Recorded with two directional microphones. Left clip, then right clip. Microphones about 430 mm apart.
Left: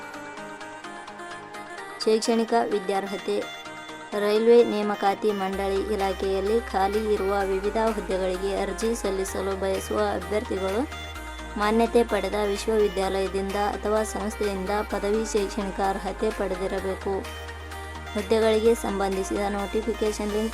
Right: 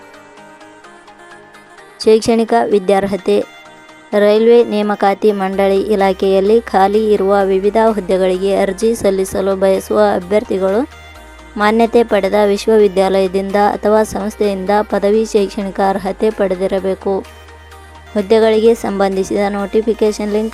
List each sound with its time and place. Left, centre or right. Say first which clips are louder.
2.0 s music: right 12 dB; centre